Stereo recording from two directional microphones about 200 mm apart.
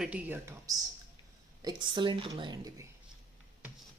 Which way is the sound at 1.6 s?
25° right (ahead or behind).